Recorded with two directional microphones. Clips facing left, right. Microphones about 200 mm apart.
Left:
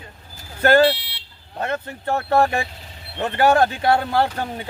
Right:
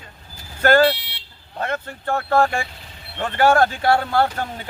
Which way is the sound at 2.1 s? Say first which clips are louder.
Even; 20° left (ahead or behind).